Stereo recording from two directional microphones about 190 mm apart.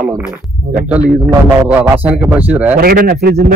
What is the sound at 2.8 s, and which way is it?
Speech, 50° right (ahead or behind).